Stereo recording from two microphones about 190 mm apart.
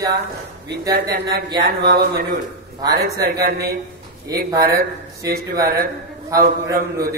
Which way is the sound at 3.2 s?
55° right (ahead or behind).